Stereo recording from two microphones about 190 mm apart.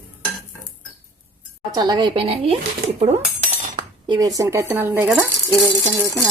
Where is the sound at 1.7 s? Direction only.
20° right (ahead or behind).